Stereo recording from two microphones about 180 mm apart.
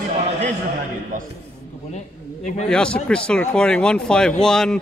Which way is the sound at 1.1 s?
50° right (ahead or behind).